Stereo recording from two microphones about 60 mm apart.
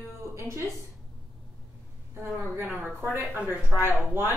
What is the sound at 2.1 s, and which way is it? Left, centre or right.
Speech, right.